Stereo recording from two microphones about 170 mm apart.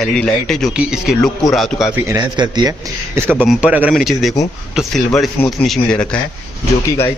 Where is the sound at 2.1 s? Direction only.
25° right (ahead or behind).